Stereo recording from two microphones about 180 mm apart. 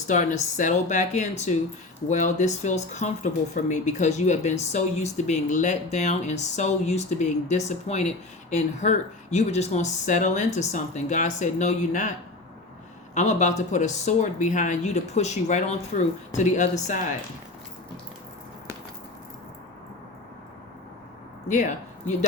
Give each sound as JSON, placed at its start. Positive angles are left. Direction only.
{"t": 0.1, "sound": "speech", "side_deg": 45}
{"t": 13.1, "sound": "speech", "side_deg": 40}
{"t": 21.4, "sound": "speech", "side_deg": 40}